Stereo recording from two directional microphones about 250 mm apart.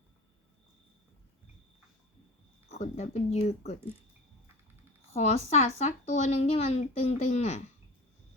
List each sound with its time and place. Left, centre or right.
2.6 s speech: left
5.1 s speech: left